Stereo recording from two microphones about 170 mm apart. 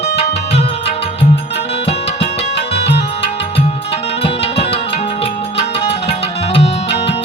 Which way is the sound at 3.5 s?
35° left (ahead or behind).